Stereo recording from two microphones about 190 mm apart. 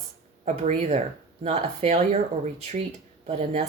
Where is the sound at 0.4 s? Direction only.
35° right (ahead or behind).